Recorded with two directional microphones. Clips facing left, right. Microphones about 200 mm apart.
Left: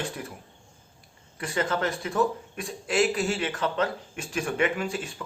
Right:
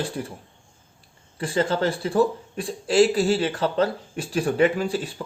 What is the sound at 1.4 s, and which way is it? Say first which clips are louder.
Speech: right 5 dB; 30° right (ahead or behind).